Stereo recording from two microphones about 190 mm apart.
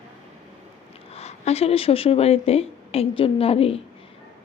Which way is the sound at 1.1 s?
35° left (ahead or behind).